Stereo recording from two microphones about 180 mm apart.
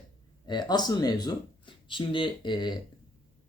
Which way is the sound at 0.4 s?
25° left (ahead or behind).